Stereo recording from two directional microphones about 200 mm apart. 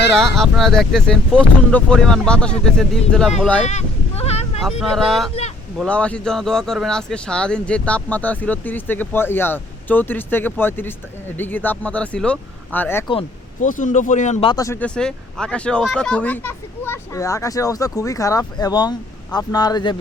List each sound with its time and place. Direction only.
0.2 s speech: centre (ahead or behind)
3.7 s a sound: 35° left (ahead or behind)
4.8 s speech: centre (ahead or behind)
13.6 s speech: 40° left (ahead or behind)
14.4 s speech: 15° left (ahead or behind)